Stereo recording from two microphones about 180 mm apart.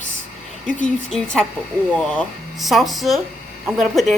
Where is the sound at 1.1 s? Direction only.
5° left (ahead or behind).